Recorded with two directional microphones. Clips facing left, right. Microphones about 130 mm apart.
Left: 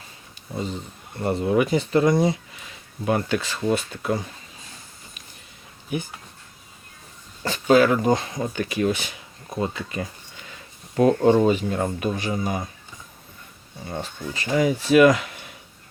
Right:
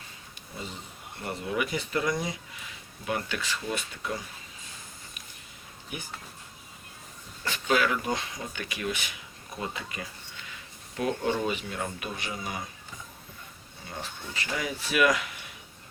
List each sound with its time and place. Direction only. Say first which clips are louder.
1.2 s speech: left 10 dB; 35° left (ahead or behind)
7.4 s speech: left 9 dB; 35° left (ahead or behind)
13.9 s speech: left 7 dB; 35° left (ahead or behind)